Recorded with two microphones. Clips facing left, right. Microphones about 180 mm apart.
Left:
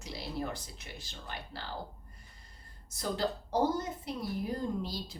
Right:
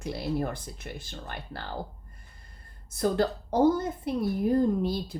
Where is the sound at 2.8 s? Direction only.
55° right (ahead or behind).